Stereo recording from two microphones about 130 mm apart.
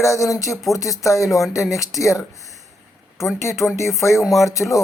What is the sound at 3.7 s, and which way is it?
Speech, 20° left (ahead or behind).